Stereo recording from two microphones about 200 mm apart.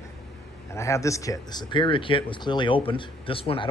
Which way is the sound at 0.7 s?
15° left (ahead or behind).